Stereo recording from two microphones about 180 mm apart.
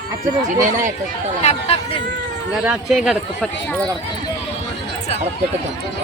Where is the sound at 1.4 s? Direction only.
35° left (ahead or behind).